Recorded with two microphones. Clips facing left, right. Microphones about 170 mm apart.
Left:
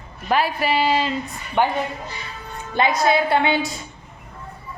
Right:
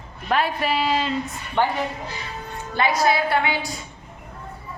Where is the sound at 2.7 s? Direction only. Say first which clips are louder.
Left 2 dB; 20° left (ahead or behind).